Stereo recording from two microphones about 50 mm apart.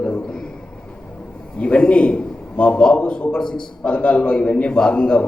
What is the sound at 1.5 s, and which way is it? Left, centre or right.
A man's voice, left.